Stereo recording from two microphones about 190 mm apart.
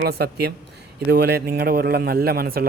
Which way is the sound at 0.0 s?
55° right (ahead or behind).